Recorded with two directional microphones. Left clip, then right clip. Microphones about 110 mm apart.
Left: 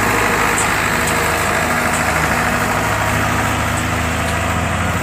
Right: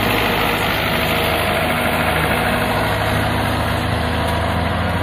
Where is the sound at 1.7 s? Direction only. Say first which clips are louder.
Left 1 dB; 40° right (ahead or behind).